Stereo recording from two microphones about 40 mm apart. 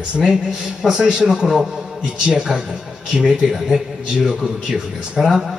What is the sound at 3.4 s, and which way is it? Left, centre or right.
A man's voice, centre.